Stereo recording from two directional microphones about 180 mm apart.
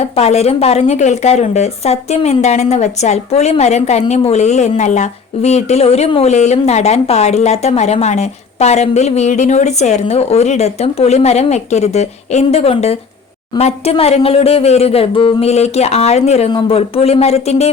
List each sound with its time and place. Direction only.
0.0 s a woman's voice: 35° left (ahead or behind)